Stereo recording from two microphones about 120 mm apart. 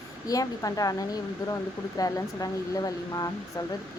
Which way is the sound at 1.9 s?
30° left (ahead or behind).